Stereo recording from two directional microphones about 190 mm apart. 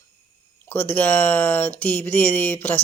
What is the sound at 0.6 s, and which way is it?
Speech, 10° left (ahead or behind).